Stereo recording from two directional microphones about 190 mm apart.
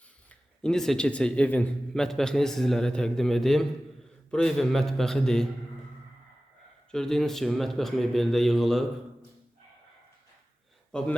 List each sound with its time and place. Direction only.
0.3 s speech: 5° left (ahead or behind)
6.9 s speech: 5° left (ahead or behind)
10.9 s speech: 5° left (ahead or behind)